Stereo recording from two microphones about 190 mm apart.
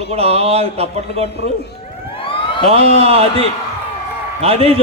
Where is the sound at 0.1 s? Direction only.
30° right (ahead or behind).